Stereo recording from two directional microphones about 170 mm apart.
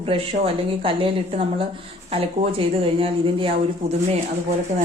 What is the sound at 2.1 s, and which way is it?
Speech, 35° right (ahead or behind).